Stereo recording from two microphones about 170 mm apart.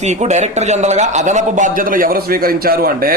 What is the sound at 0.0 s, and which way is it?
A man's voice, 40° right (ahead or behind).